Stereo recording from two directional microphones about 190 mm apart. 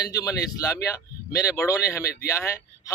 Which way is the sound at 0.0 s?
20° left (ahead or behind).